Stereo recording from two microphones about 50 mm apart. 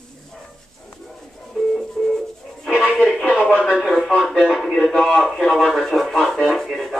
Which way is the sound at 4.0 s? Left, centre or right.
Centre.